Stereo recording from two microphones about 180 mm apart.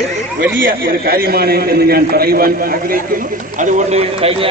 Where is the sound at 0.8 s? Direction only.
55° right (ahead or behind).